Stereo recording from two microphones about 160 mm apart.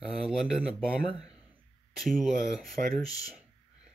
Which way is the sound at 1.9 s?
Centre (ahead or behind).